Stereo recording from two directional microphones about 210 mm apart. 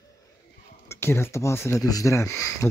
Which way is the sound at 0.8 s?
10° left (ahead or behind).